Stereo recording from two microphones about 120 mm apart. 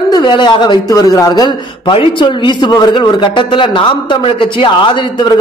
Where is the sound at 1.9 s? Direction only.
50° left (ahead or behind).